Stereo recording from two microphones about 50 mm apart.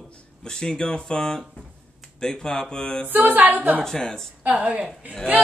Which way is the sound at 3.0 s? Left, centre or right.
Right.